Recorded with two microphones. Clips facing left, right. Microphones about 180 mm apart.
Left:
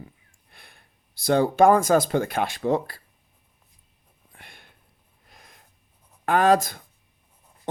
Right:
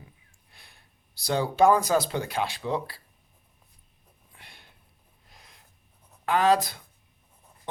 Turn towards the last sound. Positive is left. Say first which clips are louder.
# left 3 dB
turn(degrees=50)  # may be behind; listen again after turning